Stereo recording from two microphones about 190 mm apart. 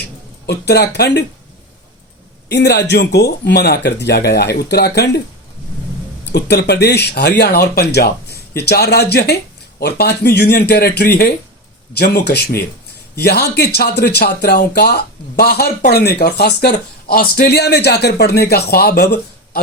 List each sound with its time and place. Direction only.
0.4 s speech: 60° left (ahead or behind)
2.5 s speech: 60° left (ahead or behind)
6.3 s speech: 60° left (ahead or behind)